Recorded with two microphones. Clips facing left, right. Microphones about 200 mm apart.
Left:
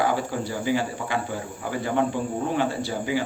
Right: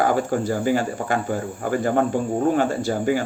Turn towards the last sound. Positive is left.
turn(degrees=-45)  # may be behind; listen again after turning